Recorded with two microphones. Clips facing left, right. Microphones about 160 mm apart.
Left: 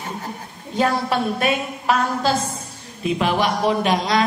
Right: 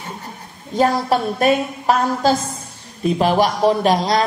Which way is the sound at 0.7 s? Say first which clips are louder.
Right 3 dB; 40° right (ahead or behind).